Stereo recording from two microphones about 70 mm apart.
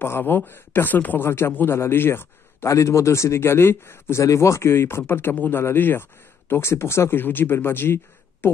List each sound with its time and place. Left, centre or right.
0.0 s a man's voice: left